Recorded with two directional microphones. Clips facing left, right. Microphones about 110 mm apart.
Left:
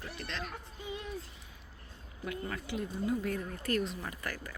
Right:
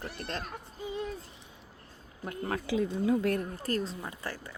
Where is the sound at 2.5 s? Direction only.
75° right (ahead or behind).